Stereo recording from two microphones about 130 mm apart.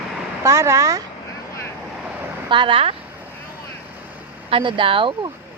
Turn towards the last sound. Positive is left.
turn(degrees=-40)  # may be behind; listen again after turning